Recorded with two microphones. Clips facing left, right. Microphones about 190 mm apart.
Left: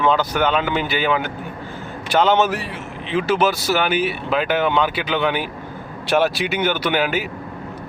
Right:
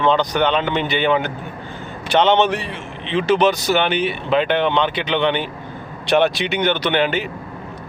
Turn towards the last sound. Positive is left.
turn(degrees=5)  # may be behind; listen again after turning